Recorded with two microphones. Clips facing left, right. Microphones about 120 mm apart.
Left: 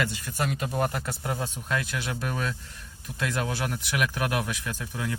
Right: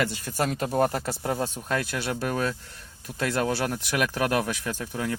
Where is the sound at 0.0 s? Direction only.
35° right (ahead or behind).